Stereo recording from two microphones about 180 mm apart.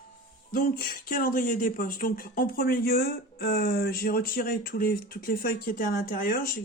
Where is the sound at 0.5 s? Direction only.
50° left (ahead or behind).